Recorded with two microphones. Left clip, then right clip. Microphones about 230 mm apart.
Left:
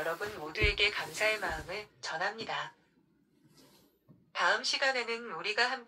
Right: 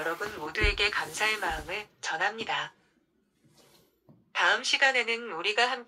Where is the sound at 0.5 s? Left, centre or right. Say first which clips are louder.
Right 2 dB; right.